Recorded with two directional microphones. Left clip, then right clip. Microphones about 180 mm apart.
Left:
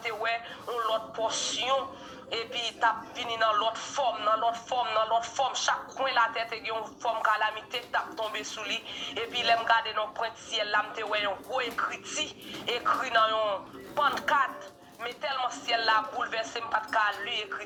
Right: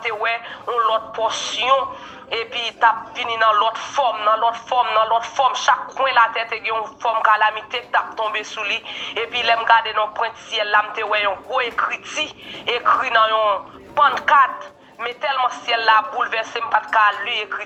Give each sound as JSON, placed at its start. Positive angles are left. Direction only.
{"t": 0.0, "sound": "speech", "side_deg": -20}